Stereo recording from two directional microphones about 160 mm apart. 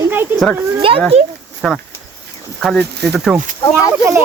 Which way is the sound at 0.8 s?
35° right (ahead or behind).